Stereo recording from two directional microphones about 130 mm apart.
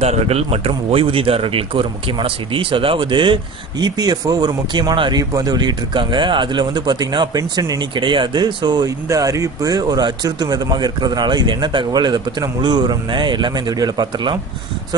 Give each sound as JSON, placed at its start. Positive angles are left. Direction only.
{"t": 0.0, "sound": "speech", "side_deg": -55}